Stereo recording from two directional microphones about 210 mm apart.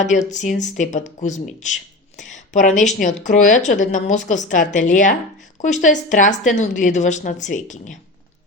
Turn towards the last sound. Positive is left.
turn(degrees=35)  # may be behind; listen again after turning